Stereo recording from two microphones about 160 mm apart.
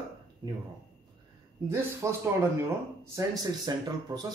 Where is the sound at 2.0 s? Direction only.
20° right (ahead or behind).